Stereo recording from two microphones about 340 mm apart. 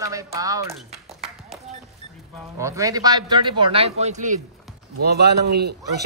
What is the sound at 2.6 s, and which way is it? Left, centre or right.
A man's voice, centre.